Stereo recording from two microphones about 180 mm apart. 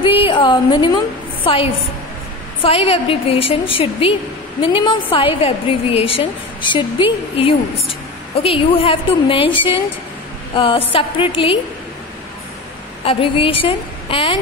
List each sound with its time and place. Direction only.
0.0 s a woman's voice: 30° left (ahead or behind)
13.0 s a woman's voice: 30° left (ahead or behind)